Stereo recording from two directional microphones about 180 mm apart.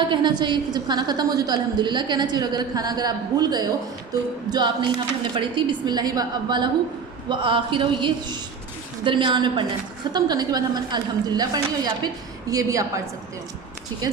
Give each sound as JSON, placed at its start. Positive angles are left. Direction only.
{"t": 0.1, "sound": "a woman's voice", "side_deg": -25}